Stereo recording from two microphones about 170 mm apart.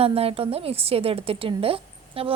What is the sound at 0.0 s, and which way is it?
A woman's voice, 35° right (ahead or behind).